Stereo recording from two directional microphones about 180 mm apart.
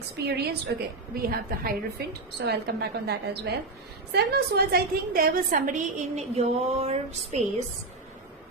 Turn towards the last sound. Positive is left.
turn(degrees=-35)  # may be behind; listen again after turning